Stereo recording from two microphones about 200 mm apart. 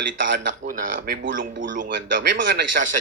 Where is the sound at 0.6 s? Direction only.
45° right (ahead or behind).